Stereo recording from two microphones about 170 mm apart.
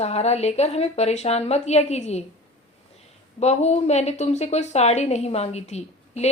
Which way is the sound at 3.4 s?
40° left (ahead or behind).